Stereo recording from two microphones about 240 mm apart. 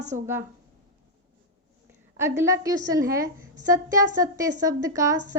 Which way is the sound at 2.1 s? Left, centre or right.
Centre.